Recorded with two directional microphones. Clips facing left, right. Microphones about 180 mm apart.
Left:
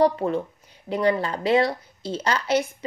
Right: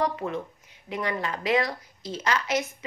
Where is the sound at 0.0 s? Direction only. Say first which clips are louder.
Left 7 dB; 35° left (ahead or behind).